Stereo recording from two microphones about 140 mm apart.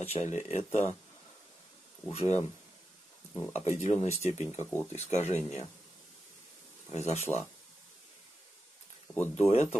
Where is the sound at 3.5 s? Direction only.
50° left (ahead or behind).